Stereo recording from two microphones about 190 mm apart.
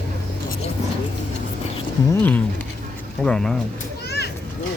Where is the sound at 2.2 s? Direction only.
10° left (ahead or behind).